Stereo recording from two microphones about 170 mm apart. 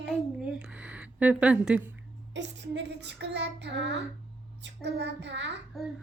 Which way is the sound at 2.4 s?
90° right.